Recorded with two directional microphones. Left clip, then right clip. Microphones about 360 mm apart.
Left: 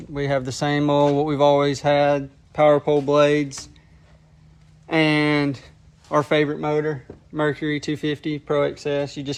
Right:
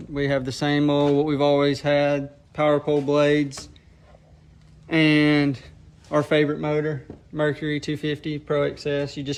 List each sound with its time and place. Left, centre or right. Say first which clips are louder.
0.1 s speech: left 1 dB; centre
4.9 s speech: even; centre